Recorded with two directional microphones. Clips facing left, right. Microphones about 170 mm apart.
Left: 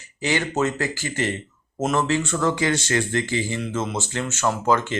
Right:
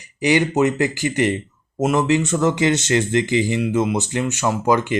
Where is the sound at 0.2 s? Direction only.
15° right (ahead or behind).